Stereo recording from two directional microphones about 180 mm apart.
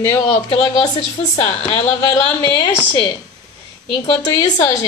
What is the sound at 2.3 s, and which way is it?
Speech, 25° left (ahead or behind).